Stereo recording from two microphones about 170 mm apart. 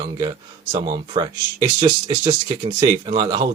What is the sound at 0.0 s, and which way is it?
Speech, 25° right (ahead or behind).